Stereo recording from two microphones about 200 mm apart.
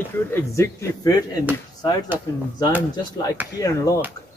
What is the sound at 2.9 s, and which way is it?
A man's voice, 20° left (ahead or behind).